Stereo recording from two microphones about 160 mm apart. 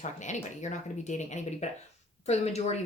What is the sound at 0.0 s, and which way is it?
Speech, 50° left (ahead or behind).